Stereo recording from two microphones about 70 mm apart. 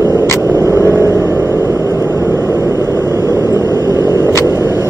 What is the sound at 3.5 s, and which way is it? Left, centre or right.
Vehicle, right.